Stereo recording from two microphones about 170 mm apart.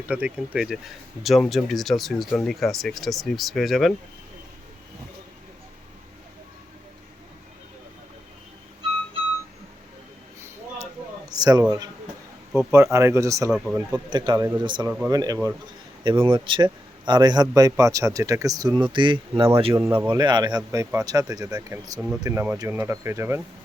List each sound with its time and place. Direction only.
0.1 s speech: 10° right (ahead or behind)
11.3 s a sound: 20° right (ahead or behind)
12.5 s a man's voice: 15° right (ahead or behind); by 19.8 s 30° right (ahead or behind)
19.8 s speech: 10° right (ahead or behind)
20.1 s a man's voice: 25° right (ahead or behind)